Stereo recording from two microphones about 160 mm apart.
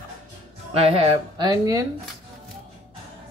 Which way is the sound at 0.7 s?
35° right (ahead or behind).